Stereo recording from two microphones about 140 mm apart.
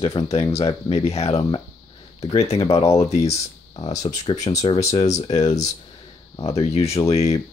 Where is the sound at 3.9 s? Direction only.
25° left (ahead or behind).